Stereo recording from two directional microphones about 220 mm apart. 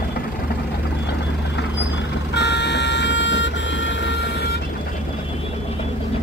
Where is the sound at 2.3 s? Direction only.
50° left (ahead or behind).